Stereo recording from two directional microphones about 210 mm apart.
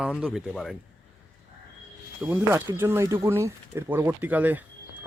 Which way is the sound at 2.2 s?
10° right (ahead or behind).